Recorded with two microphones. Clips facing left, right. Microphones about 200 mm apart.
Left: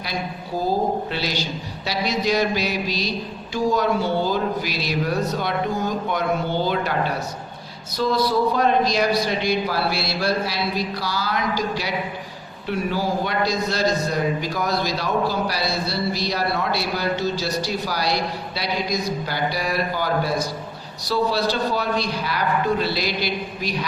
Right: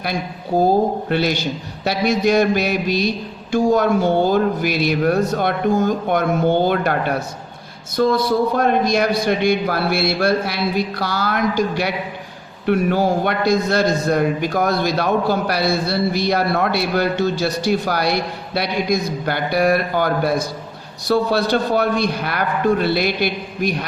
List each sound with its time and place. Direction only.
1.1 s a man's voice: 55° right (ahead or behind)
7.9 s a man's voice: 50° right (ahead or behind)